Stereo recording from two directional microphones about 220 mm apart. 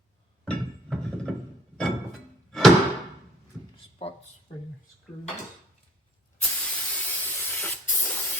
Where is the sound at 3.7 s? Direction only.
25° left (ahead or behind).